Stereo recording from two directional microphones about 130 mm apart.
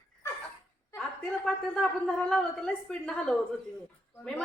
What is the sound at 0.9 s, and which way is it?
A woman's voice, 5° left (ahead or behind).